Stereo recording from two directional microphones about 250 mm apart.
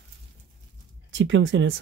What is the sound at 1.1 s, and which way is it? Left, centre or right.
Speech, right.